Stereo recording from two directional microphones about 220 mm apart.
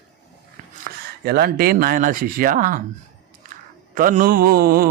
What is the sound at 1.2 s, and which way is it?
Mantra, 45° right (ahead or behind).